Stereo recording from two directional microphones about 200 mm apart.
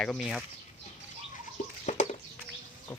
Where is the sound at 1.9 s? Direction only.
40° left (ahead or behind).